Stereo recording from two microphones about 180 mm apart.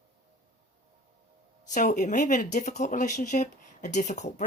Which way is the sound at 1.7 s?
45° left (ahead or behind).